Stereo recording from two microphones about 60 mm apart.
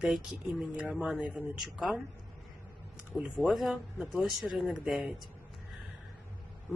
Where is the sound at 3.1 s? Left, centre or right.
Centre.